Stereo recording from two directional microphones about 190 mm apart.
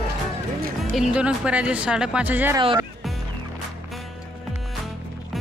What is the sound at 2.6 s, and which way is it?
Speech, 25° right (ahead or behind).